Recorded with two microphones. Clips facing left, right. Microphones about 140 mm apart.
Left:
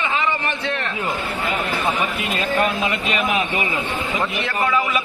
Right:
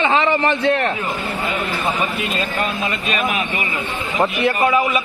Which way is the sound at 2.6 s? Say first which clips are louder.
Left 2 dB; 20° left (ahead or behind).